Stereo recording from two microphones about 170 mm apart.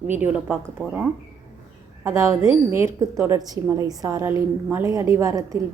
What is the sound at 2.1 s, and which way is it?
A woman's voice, 15° right (ahead or behind).